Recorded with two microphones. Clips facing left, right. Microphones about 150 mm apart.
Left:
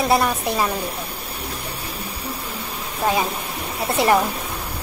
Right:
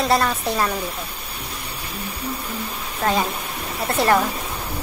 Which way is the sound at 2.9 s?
10° left (ahead or behind).